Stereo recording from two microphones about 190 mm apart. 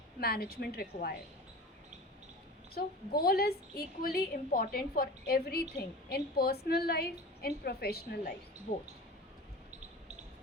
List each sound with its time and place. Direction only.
0.2 s a woman's voice: 55° left (ahead or behind)
2.7 s a woman's voice: 55° left (ahead or behind)